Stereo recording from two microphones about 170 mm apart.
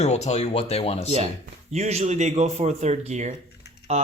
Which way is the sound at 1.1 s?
40° right (ahead or behind).